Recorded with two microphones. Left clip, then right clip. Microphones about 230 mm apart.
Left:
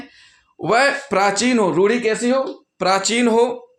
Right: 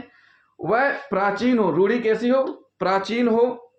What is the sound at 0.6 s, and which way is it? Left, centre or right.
A man's voice, left.